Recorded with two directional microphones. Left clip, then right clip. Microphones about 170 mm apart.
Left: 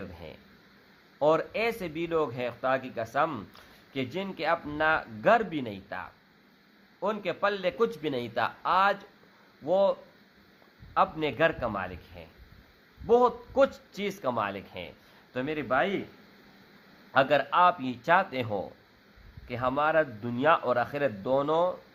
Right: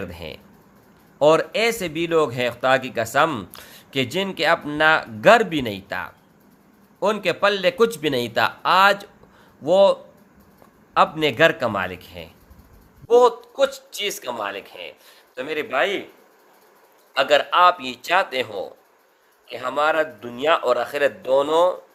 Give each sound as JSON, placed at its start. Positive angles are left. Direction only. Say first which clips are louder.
{"t": 0.1, "sound": "a man's voice", "louder": "right 10 dB", "side_deg": -20}
{"t": 17.2, "sound": "a man's voice", "louder": "right 6 dB", "side_deg": -20}